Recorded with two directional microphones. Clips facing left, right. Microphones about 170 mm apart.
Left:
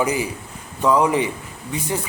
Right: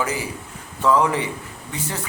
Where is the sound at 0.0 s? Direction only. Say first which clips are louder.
Left 4 dB; 15° left (ahead or behind).